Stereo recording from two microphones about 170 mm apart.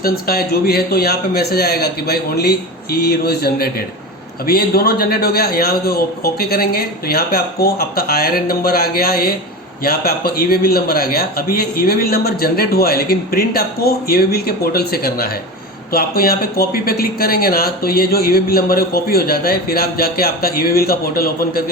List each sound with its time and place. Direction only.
0.0 s a man's voice: 60° left (ahead or behind)